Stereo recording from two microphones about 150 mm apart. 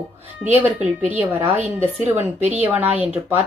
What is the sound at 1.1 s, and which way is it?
A woman's voice, 15° right (ahead or behind).